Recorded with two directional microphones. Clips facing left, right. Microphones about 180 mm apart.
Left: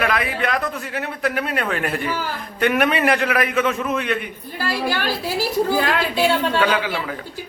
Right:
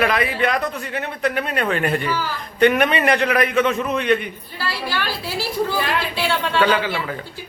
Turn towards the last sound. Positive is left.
turn(degrees=10)  # may be behind; listen again after turning